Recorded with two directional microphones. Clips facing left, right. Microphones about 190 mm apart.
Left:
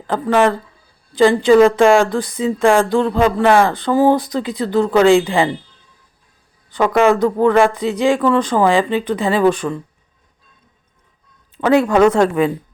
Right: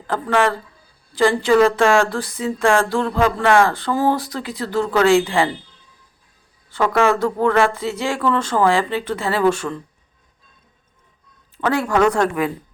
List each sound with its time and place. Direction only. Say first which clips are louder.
0.1 s speech: left 4 dB; 20° left (ahead or behind)
6.7 s speech: left 4 dB; 15° left (ahead or behind)
11.5 s speech: left 6 dB; 20° left (ahead or behind)